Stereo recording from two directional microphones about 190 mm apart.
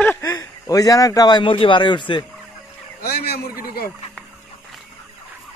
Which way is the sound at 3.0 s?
55° left (ahead or behind).